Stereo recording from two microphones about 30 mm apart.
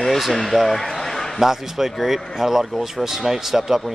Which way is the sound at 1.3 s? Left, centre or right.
Centre.